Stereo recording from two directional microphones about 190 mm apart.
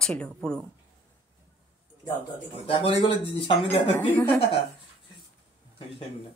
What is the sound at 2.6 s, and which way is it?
Speech, 30° left (ahead or behind).